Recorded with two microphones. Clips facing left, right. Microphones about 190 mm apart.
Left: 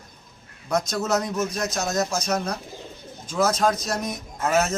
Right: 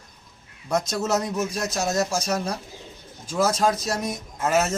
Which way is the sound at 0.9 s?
5° right (ahead or behind).